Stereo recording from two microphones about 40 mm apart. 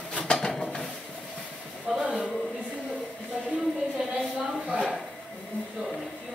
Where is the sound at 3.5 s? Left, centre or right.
Centre.